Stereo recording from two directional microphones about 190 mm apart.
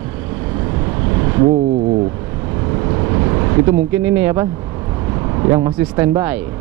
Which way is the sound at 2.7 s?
25° right (ahead or behind).